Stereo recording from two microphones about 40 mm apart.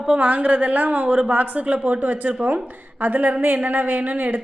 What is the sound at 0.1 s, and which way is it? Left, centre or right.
A woman's voice, right.